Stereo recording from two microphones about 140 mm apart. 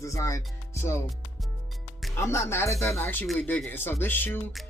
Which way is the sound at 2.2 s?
20° left (ahead or behind).